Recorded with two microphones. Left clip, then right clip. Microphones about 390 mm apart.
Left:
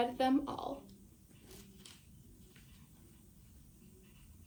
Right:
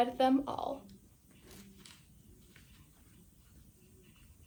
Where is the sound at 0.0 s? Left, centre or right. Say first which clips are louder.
Right 3 dB; centre.